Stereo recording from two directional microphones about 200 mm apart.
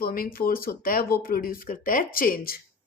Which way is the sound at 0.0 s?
45° left (ahead or behind).